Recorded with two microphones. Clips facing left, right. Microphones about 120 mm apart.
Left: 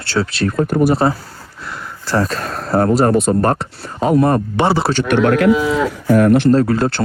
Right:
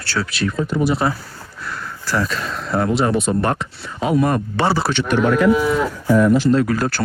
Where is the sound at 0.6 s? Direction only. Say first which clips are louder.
Left 5 dB; 50° left (ahead or behind).